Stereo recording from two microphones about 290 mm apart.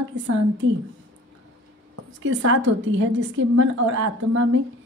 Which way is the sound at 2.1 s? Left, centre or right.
Right.